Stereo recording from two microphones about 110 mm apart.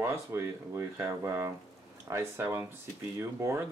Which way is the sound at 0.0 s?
25° right (ahead or behind).